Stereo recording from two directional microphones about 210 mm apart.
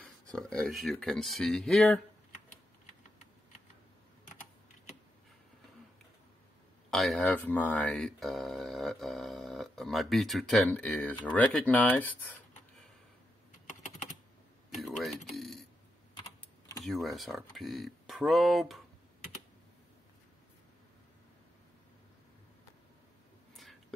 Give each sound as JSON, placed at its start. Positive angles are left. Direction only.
{"t": 0.0, "sound": "speech", "side_deg": 0}
{"t": 6.9, "sound": "speech", "side_deg": 0}
{"t": 14.8, "sound": "a sound", "side_deg": 0}
{"t": 16.2, "sound": "typing", "side_deg": 15}
{"t": 16.8, "sound": "speech", "side_deg": 0}
{"t": 23.5, "sound": "a sound", "side_deg": 0}